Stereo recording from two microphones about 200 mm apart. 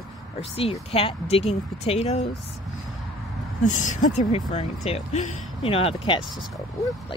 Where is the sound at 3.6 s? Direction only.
40° left (ahead or behind).